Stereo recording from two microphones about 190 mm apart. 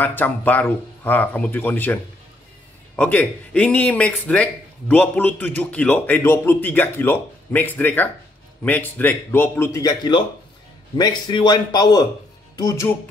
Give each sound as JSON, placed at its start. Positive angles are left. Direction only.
{"t": 0.0, "sound": "speech", "side_deg": 10}
{"t": 3.0, "sound": "a man's voice", "side_deg": 5}